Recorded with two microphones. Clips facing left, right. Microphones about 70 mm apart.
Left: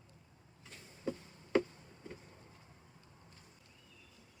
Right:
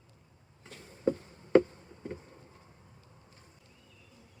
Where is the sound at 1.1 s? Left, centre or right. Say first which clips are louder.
Right 11 dB; right.